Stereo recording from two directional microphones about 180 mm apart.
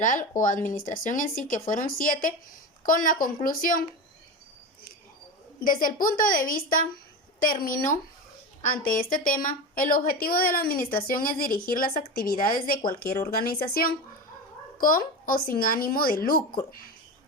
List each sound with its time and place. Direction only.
0.0 s a woman's voice: 45° left (ahead or behind)
5.5 s a woman's voice: 50° left (ahead or behind)